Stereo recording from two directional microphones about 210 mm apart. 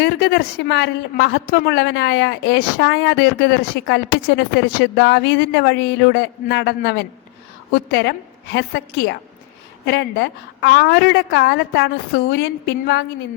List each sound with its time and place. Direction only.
0.0 s a woman's voice: 50° left (ahead or behind)